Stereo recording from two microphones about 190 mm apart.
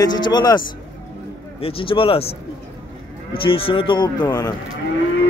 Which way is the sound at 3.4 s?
30° left (ahead or behind).